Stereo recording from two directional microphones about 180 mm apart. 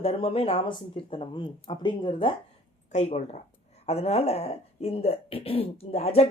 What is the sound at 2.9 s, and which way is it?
Speech, 40° left (ahead or behind).